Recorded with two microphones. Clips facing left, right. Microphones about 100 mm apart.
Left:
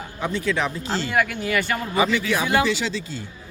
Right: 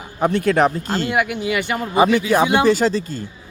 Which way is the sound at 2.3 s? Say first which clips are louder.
Right 6 dB; 40° right (ahead or behind).